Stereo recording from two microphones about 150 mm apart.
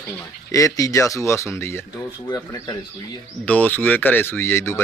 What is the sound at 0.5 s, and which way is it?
Speech, 20° left (ahead or behind).